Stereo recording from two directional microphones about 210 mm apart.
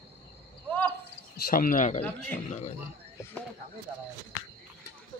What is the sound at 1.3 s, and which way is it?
Speech, 45° left (ahead or behind).